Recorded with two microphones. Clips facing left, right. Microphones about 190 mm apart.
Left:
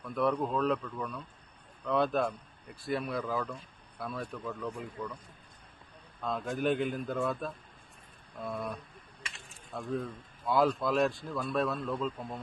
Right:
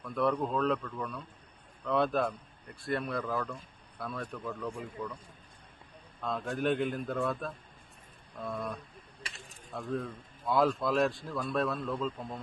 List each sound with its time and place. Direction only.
0.0 s speech: centre (ahead or behind)
6.2 s speech: centre (ahead or behind)
9.2 s a sound: 35° right (ahead or behind)
9.7 s speech: centre (ahead or behind)